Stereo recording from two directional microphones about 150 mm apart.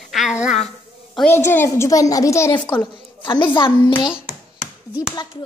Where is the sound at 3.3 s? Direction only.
35° left (ahead or behind).